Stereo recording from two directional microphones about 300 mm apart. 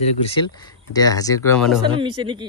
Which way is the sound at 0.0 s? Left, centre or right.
Centre.